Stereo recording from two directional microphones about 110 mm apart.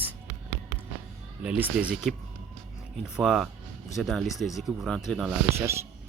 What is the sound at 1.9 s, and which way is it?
Speech, centre (ahead or behind).